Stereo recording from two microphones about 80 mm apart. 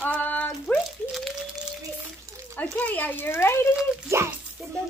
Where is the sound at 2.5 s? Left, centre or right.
Centre.